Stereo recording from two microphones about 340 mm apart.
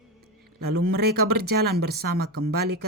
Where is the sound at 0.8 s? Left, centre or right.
Right.